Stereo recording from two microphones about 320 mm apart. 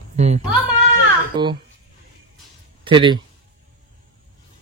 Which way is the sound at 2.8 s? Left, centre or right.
Centre.